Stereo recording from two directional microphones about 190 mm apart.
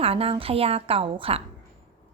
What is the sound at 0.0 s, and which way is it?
A woman's voice, 30° right (ahead or behind).